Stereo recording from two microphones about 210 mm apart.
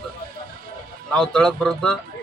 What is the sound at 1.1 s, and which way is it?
Speech, 5° left (ahead or behind).